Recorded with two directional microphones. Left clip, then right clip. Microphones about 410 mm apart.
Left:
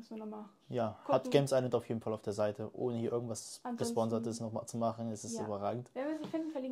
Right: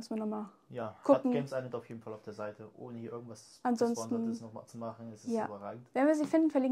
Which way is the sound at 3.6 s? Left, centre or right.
Right.